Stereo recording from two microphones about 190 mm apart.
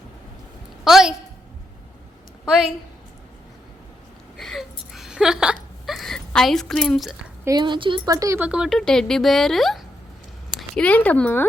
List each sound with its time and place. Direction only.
0.9 s a woman's voice: centre (ahead or behind)
2.4 s a woman's voice: centre (ahead or behind)
4.4 s a sound: centre (ahead or behind)
7.4 s speech: 20° right (ahead or behind)
8.4 s speech: 5° right (ahead or behind)